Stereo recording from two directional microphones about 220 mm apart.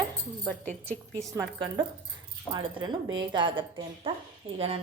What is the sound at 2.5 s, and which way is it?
Speech, 20° right (ahead or behind).